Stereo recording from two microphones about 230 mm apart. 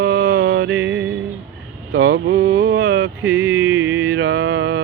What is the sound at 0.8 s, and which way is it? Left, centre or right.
Music, right.